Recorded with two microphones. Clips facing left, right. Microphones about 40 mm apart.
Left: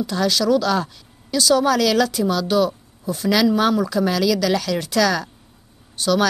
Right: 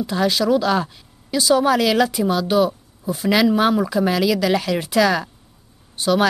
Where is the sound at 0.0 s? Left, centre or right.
Centre.